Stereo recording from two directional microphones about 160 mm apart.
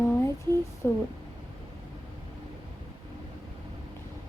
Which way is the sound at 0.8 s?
15° left (ahead or behind).